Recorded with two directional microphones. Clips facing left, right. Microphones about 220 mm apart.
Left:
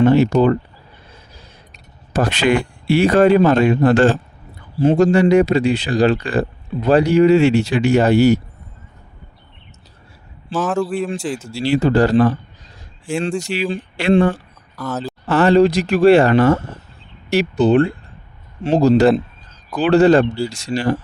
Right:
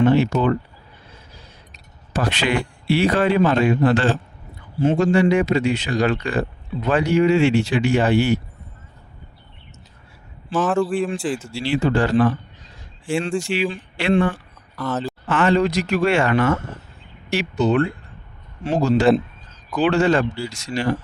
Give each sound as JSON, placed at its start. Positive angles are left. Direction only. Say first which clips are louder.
{"t": 0.0, "sound": "speech", "louder": "left 4 dB", "side_deg": 40}
{"t": 2.1, "sound": "a man's voice", "louder": "left 5 dB", "side_deg": 45}
{"t": 10.5, "sound": "a man's voice", "louder": "even", "side_deg": 0}
{"t": 11.4, "sound": "speech", "louder": "left 7 dB", "side_deg": 40}
{"t": 13.4, "sound": "speech", "louder": "left 1 dB", "side_deg": 40}
{"t": 14.8, "sound": "a man's voice", "louder": "even", "side_deg": 0}
{"t": 15.3, "sound": "speech", "louder": "left 6 dB", "side_deg": 35}